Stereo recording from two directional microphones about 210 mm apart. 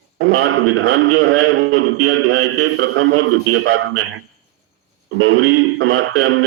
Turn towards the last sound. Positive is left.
turn(degrees=-70)  # may be behind; listen again after turning